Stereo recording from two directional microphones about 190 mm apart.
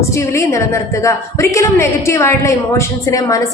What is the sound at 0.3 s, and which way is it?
A woman's voice, 15° left (ahead or behind).